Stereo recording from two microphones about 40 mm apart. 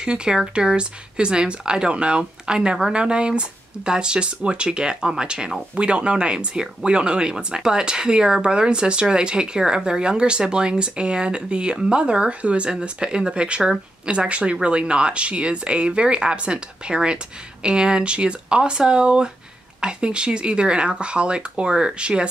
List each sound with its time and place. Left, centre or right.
0.0 s speech: right